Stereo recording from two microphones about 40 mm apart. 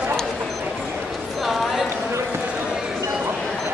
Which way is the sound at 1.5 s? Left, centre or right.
Centre.